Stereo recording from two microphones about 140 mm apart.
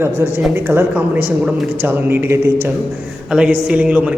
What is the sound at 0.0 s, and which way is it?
A man's voice, 15° right (ahead or behind).